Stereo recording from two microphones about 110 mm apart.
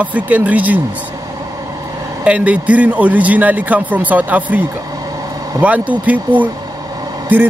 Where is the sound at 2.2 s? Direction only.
10° right (ahead or behind).